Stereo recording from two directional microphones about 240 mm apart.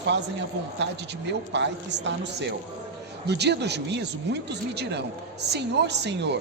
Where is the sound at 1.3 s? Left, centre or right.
Right.